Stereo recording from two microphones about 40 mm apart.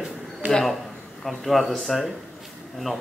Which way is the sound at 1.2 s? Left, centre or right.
Centre.